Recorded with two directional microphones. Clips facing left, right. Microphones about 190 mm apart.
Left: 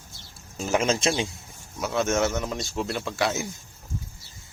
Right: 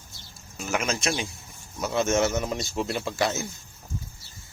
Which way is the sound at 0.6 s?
30° left (ahead or behind).